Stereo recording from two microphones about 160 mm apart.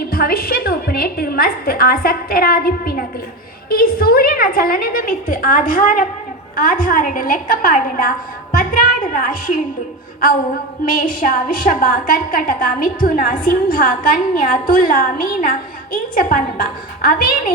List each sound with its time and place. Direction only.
0.1 s a woman's voice: 65° left (ahead or behind)
10.8 s a woman's voice: 60° left (ahead or behind)